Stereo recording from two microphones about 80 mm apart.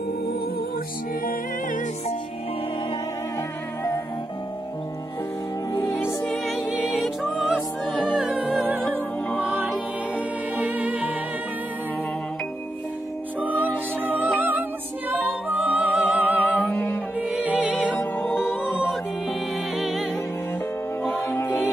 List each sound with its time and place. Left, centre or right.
5.9 s music: left
6.2 s music: centre
10.1 s music: right
13.4 s music: right
16.3 s music: centre
17.3 s music: centre
17.9 s music: left
19.8 s music: centre
21.0 s music: left